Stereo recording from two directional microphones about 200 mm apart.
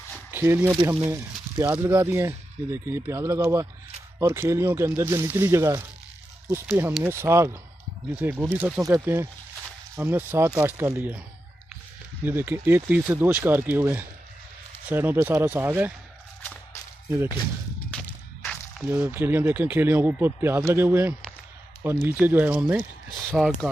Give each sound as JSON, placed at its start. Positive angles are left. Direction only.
{"t": 0.3, "sound": "speech", "side_deg": -10}
{"t": 12.3, "sound": "speech", "side_deg": -10}
{"t": 17.1, "sound": "speech", "side_deg": -10}
{"t": 17.9, "sound": "a sound", "side_deg": 5}
{"t": 18.9, "sound": "speech", "side_deg": -10}